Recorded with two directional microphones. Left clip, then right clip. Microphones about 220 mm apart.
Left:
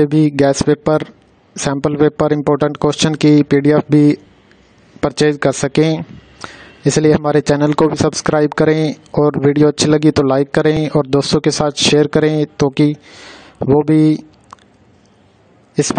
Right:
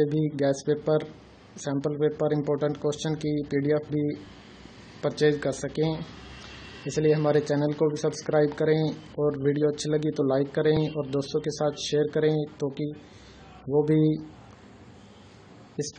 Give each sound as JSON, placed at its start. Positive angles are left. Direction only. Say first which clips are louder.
{"t": 0.0, "sound": "speech", "louder": "left 13 dB", "side_deg": 50}
{"t": 5.0, "sound": "speech", "louder": "left 10 dB", "side_deg": 50}